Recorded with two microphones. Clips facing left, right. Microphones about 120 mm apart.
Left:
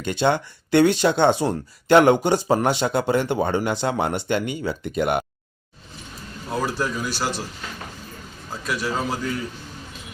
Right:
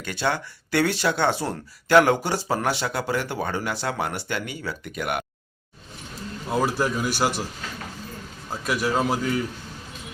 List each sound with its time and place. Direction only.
0.0 s speech: 20° left (ahead or behind)
6.5 s a man's voice: 10° right (ahead or behind)
8.6 s a man's voice: 5° right (ahead or behind)